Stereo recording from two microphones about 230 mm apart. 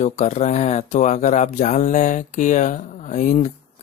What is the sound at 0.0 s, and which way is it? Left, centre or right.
Speech, left.